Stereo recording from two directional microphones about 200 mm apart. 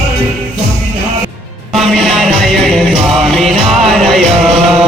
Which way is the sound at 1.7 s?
Centre (ahead or behind).